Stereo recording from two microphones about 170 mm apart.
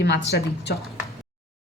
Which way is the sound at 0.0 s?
85° left.